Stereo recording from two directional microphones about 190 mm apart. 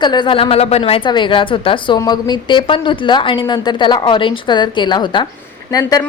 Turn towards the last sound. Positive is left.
turn(degrees=20)  # may be behind; listen again after turning